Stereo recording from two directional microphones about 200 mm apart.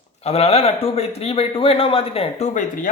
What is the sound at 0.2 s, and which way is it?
Speech, 30° left (ahead or behind).